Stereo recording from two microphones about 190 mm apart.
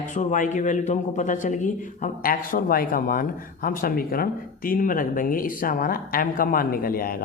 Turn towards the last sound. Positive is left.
turn(degrees=50)  # may be behind; listen again after turning